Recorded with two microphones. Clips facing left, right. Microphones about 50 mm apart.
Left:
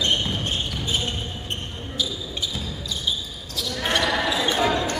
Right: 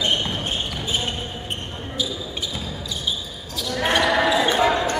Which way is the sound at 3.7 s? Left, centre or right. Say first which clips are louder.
Right 4 dB; centre.